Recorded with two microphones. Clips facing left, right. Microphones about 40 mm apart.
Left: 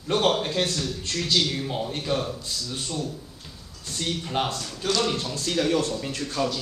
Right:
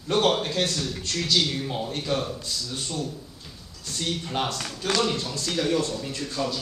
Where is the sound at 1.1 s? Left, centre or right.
Centre.